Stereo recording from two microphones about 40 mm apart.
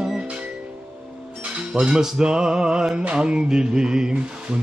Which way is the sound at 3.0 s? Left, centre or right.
Right.